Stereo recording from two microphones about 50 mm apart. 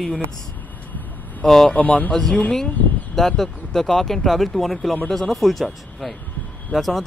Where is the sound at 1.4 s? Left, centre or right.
Centre.